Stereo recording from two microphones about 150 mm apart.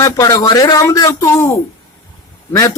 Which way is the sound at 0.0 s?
20° left (ahead or behind).